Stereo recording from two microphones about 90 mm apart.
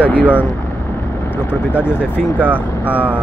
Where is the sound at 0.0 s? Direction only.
15° left (ahead or behind).